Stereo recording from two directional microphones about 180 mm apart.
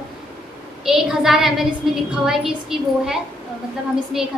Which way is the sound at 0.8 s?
Centre (ahead or behind).